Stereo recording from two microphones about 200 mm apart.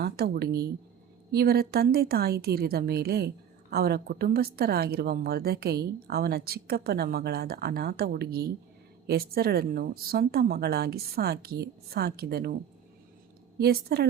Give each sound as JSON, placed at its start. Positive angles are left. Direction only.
{"t": 0.0, "sound": "a woman's voice", "side_deg": -50}
{"t": 13.6, "sound": "a woman's voice", "side_deg": -50}